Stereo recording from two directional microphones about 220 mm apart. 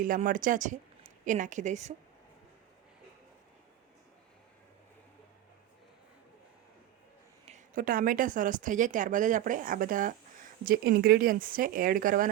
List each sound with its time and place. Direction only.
0.0 s speech: 35° right (ahead or behind)
7.4 s speech: 35° right (ahead or behind)